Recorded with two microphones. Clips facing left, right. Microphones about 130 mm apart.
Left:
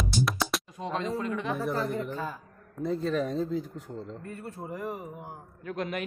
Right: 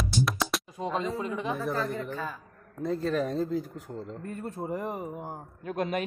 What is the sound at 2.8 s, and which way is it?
Speech, centre (ahead or behind).